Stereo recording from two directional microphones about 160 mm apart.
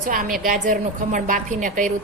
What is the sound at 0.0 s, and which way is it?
A woman's voice, 60° right (ahead or behind).